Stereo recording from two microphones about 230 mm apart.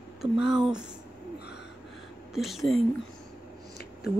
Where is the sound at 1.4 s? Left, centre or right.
Left.